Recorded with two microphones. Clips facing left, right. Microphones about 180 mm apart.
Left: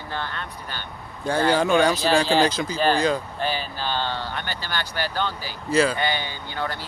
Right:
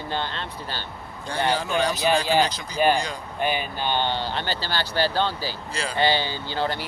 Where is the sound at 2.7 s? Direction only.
15° right (ahead or behind).